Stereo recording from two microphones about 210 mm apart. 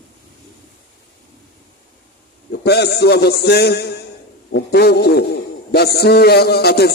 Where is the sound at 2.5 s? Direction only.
50° left (ahead or behind).